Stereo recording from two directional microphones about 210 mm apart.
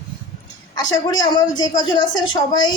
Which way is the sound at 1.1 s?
20° left (ahead or behind).